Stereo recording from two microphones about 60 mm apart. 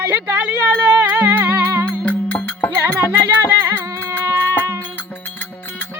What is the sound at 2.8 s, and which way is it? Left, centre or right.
Music, right.